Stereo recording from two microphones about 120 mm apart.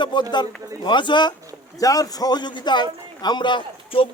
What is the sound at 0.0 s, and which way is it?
Speech, 40° left (ahead or behind).